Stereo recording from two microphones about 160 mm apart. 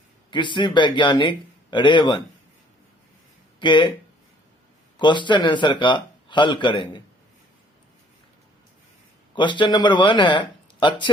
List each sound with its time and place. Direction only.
0.3 s a man's voice: 30° left (ahead or behind)
3.6 s a man's voice: 30° left (ahead or behind)
4.9 s a man's voice: 30° left (ahead or behind)
9.3 s a man's voice: 30° left (ahead or behind)